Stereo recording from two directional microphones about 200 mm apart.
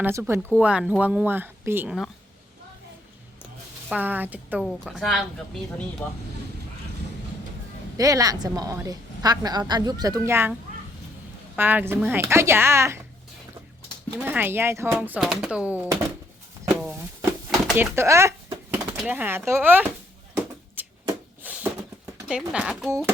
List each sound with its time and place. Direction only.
0.0 s speech: 10° right (ahead or behind)
3.8 s speech: 10° right (ahead or behind); by 6.2 s 10° left (ahead or behind)
7.9 s a woman's voice: 15° right (ahead or behind)
11.5 s speech: 10° right (ahead or behind)
14.2 s speech: 10° right (ahead or behind)
16.9 s a sound: 10° right (ahead or behind)
17.7 s speech: 10° right (ahead or behind)
20.8 s a sound: 10° right (ahead or behind)
22.3 s speech: 5° right (ahead or behind)